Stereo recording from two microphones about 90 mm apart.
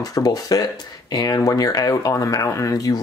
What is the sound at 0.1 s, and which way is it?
Speech, 45° left (ahead or behind).